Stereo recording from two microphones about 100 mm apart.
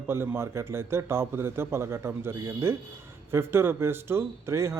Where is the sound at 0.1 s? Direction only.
25° right (ahead or behind).